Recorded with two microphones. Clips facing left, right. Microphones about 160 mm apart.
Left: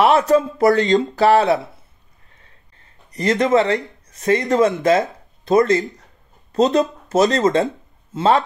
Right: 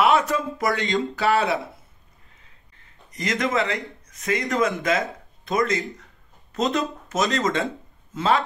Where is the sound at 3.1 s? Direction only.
35° left (ahead or behind).